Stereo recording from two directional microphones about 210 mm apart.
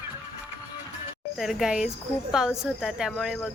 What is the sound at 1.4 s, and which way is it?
A woman's voice, centre (ahead or behind).